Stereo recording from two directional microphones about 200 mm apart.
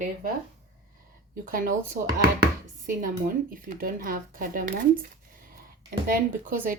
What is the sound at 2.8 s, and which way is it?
Speech, 45° right (ahead or behind).